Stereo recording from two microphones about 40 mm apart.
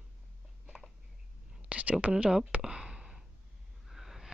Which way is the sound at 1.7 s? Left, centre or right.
Right.